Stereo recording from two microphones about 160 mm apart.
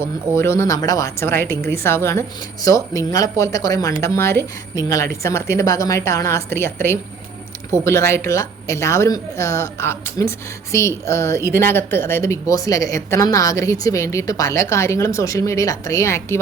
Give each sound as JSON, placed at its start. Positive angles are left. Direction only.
{"t": 0.0, "sound": "a woman's voice", "side_deg": 15}